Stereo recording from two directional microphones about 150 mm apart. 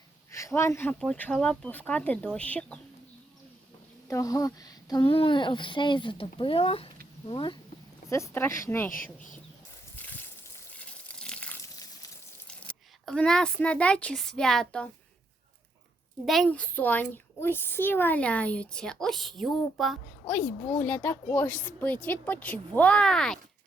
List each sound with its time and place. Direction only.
0.3 s a child's voice: 20° left (ahead or behind)
4.1 s speech: 25° left (ahead or behind)
8.0 s a child's voice: 20° left (ahead or behind)
9.9 s a sound: 10° left (ahead or behind)
10.8 s water: 10° left (ahead or behind)
12.5 s speech: 5° left (ahead or behind)
16.2 s a child's voice: centre (ahead or behind)
20.8 s a child's voice: 15° left (ahead or behind)